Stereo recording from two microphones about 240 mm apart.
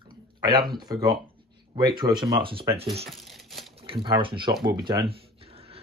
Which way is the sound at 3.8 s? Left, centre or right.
Right.